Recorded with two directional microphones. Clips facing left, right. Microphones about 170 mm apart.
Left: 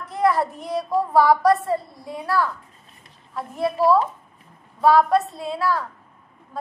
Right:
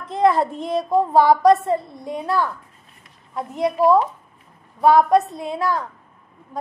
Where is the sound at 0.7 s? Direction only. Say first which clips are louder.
Right 4 dB; 20° right (ahead or behind).